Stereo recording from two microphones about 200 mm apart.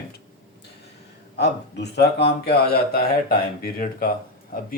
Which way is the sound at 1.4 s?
55° left (ahead or behind).